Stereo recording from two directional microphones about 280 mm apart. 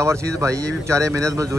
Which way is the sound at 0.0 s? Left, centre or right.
Centre.